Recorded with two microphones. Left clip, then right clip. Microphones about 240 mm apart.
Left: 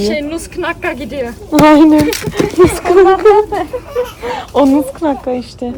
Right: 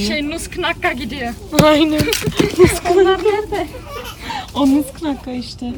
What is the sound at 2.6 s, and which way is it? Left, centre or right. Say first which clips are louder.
Speech: left 5 dB; centre.